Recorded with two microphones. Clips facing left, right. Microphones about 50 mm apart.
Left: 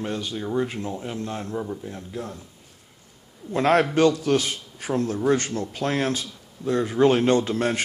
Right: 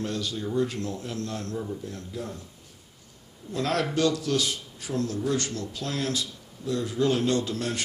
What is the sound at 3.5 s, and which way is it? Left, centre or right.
A man's voice, left.